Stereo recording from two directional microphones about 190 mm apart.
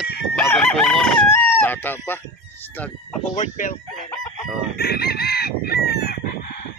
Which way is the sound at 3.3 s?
40° left (ahead or behind).